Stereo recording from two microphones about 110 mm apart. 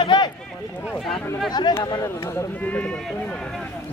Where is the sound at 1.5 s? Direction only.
40° left (ahead or behind).